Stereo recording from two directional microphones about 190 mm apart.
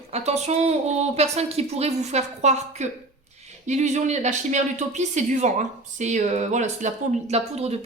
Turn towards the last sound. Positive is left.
turn(degrees=-35)  # may be behind; listen again after turning